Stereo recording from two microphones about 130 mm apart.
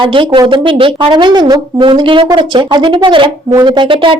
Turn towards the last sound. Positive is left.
turn(degrees=-40)  # may be behind; listen again after turning